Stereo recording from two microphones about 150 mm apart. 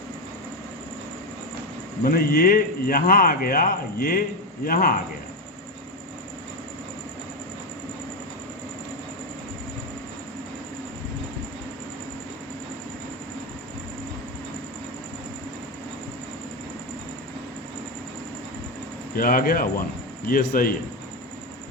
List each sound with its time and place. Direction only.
2.0 s speech: 75° left (ahead or behind)
19.1 s speech: 70° left (ahead or behind)